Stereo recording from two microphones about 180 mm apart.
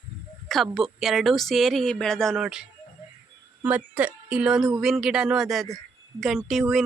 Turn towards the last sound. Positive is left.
turn(degrees=0)  # may be behind; listen again after turning